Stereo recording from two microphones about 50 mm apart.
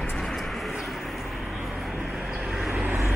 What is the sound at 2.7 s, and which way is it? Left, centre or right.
Vehicle, right.